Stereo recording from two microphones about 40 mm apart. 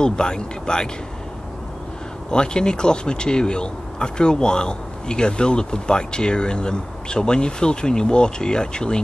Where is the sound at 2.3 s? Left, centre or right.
Left.